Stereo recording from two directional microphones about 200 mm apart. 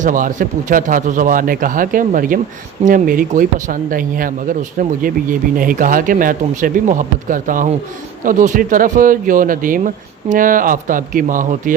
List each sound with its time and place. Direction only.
0.0 s speech: 40° right (ahead or behind)